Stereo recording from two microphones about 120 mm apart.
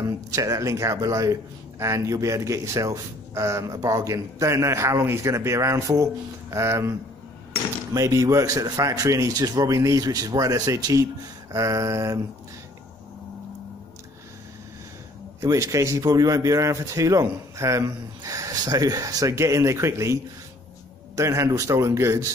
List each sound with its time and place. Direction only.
0.0 s speech: 30° right (ahead or behind)
15.4 s speech: 25° right (ahead or behind)
21.2 s speech: 25° right (ahead or behind)